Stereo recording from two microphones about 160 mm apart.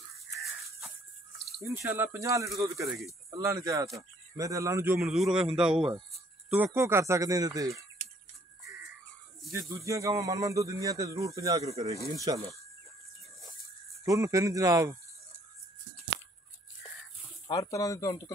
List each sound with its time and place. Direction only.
0.4 s a sound: centre (ahead or behind)
1.6 s speech: 15° right (ahead or behind)
5.0 s a man's voice: centre (ahead or behind); by 7.8 s 20° right (ahead or behind)
9.5 s speech: 20° right (ahead or behind)
14.0 s speech: 20° right (ahead or behind)
17.5 s speech: 20° left (ahead or behind)